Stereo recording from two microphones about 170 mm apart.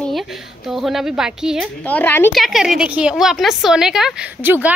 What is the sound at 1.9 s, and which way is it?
Speech, 10° left (ahead or behind).